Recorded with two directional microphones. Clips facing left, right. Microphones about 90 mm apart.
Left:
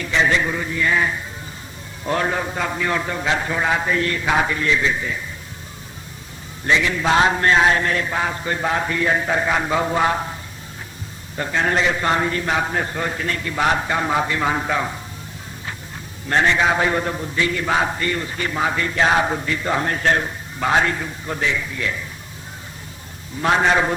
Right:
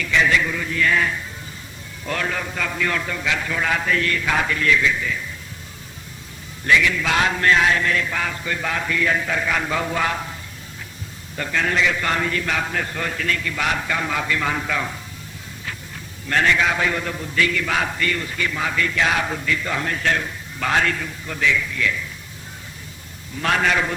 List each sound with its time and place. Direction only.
0.0 s a man's voice: 30° left (ahead or behind)
6.7 s mantra: 30° left (ahead or behind)
11.3 s a man's voice: 25° left (ahead or behind)
16.3 s a man's voice: 25° left (ahead or behind)
20.6 s a man's voice: 20° left (ahead or behind)
23.4 s a man's voice: 25° left (ahead or behind)